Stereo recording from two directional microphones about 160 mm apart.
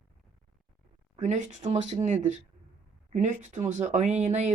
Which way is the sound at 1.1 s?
50° right (ahead or behind).